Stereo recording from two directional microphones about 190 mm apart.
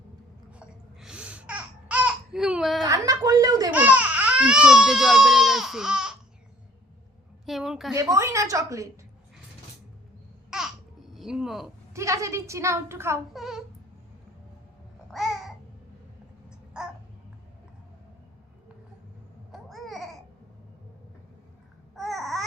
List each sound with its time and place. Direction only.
0.5 s babbling: 5° right (ahead or behind)
2.8 s speech: 20° right (ahead or behind)
3.7 s speech: 10° right (ahead or behind)
7.4 s speech: centre (ahead or behind)
7.9 s a woman's voice: 15° right (ahead or behind)
10.5 s babbling: 5° right (ahead or behind)
11.1 s speech: centre (ahead or behind)
11.9 s a woman's voice: 15° right (ahead or behind)
13.3 s speech: centre (ahead or behind)
15.1 s babbling: centre (ahead or behind)
16.7 s babbling: 5° right (ahead or behind)
19.5 s babbling: centre (ahead or behind)
21.9 s babbling: centre (ahead or behind)